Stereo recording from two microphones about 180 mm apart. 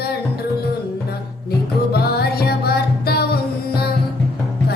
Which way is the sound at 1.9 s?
60° left (ahead or behind).